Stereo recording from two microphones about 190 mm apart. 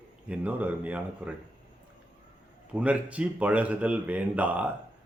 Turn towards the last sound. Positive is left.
turn(degrees=-10)  # may be behind; listen again after turning